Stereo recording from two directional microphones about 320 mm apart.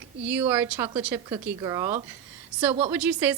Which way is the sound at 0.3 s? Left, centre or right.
Centre.